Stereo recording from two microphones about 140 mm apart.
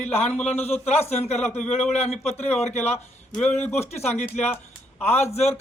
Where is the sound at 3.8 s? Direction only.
50° left (ahead or behind).